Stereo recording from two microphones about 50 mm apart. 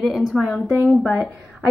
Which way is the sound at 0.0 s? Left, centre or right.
Centre.